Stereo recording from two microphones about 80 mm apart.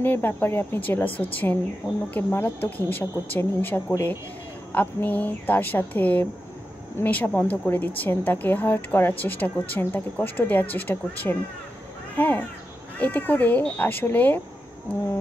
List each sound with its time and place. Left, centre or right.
0.0 s a woman's voice: left